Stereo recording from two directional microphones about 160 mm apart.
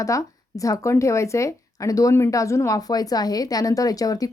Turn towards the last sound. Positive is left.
turn(degrees=20)  # may be behind; listen again after turning